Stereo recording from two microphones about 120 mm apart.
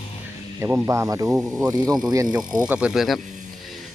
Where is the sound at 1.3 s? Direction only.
5° right (ahead or behind).